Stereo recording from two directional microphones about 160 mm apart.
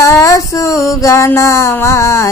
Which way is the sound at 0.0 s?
20° left (ahead or behind).